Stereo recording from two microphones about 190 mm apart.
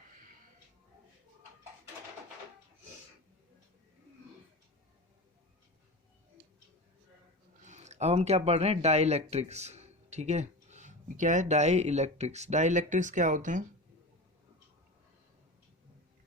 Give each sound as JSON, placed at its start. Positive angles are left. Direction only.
{"t": 7.6, "sound": "speech", "side_deg": -40}